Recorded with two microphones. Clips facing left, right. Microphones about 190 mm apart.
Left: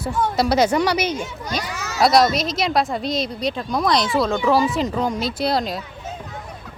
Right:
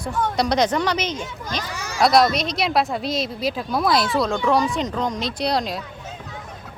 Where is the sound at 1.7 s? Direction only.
10° right (ahead or behind).